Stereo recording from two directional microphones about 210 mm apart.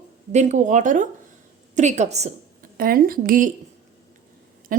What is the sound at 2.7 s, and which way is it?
Speech, 45° right (ahead or behind).